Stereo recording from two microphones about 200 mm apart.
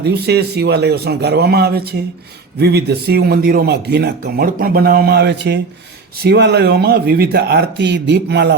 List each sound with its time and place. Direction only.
0.0 s a man's voice: 55° right (ahead or behind)